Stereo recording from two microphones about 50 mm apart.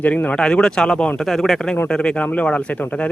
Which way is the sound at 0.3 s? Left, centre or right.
Centre.